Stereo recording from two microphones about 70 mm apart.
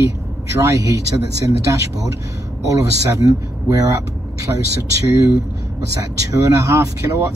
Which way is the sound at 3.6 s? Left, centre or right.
Right.